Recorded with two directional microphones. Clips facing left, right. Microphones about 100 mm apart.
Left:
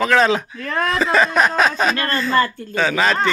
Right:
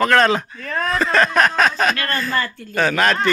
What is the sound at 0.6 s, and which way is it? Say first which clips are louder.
Speech: left 2 dB; 90° left.